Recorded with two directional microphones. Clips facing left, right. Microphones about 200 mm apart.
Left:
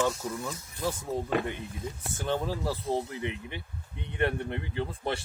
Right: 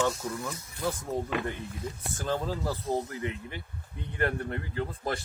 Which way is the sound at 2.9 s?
20° left (ahead or behind).